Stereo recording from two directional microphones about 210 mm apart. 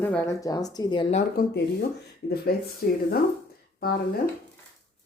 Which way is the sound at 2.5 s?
50° left (ahead or behind).